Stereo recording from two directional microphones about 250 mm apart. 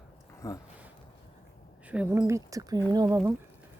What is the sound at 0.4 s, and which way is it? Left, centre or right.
Speech, centre.